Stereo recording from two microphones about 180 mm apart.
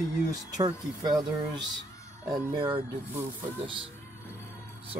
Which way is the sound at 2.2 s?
20° right (ahead or behind).